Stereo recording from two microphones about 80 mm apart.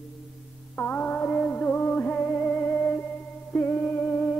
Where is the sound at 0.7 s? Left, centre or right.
Centre.